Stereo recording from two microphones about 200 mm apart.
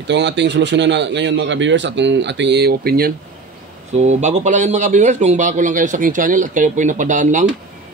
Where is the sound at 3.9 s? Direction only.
35° right (ahead or behind).